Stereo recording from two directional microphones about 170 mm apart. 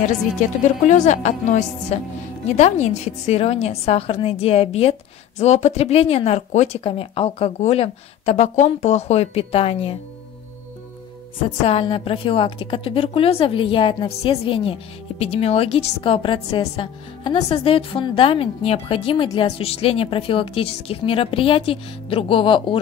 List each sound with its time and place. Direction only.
0.8 s a woman's voice: 45° left (ahead or behind)
11.4 s a woman's voice: 35° left (ahead or behind)